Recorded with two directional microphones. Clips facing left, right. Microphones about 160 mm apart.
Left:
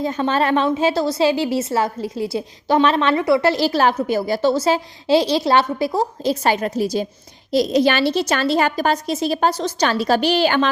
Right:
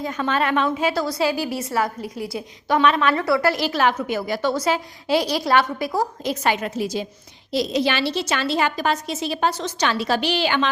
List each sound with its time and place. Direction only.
0.0 s a woman's voice: 30° left (ahead or behind)